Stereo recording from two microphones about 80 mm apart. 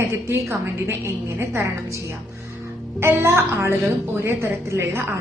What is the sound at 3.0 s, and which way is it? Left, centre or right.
A woman's voice, right.